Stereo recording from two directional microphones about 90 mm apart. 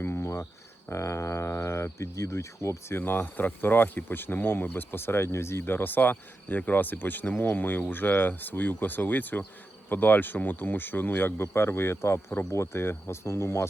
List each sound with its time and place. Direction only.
0.0 s cricket: 30° left (ahead or behind)
0.9 s speech: 30° left (ahead or behind)
3.0 s speech: 20° left (ahead or behind)